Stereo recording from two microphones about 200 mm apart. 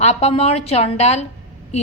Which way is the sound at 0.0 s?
35° left (ahead or behind).